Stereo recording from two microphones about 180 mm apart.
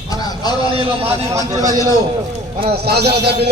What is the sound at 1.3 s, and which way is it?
Speech, 20° right (ahead or behind).